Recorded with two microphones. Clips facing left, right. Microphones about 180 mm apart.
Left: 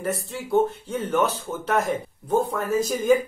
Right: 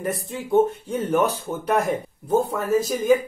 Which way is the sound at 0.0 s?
15° right (ahead or behind).